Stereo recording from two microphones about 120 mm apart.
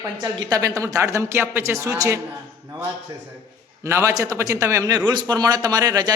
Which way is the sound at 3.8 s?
25° right (ahead or behind).